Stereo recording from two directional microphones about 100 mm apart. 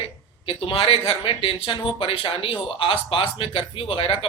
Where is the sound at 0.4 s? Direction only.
65° left (ahead or behind).